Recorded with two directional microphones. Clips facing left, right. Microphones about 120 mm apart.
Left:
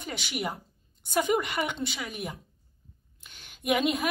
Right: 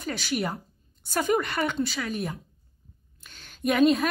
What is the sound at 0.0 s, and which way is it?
A woman's voice, 20° left (ahead or behind).